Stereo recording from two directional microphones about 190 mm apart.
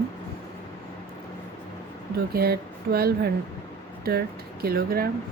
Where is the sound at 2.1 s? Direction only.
55° right (ahead or behind).